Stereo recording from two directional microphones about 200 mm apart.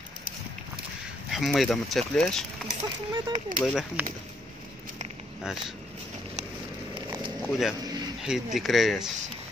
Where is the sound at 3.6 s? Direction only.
Centre (ahead or behind).